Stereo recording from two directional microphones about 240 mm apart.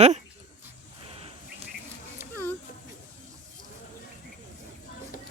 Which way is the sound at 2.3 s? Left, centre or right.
Centre.